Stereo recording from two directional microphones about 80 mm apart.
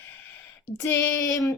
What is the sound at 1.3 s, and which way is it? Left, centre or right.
Speech, left.